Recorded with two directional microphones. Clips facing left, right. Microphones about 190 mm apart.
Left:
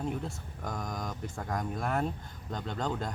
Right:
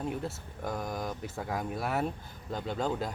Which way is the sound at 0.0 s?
5° right (ahead or behind).